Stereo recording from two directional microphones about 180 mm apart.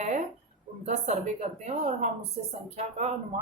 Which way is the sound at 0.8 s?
40° right (ahead or behind).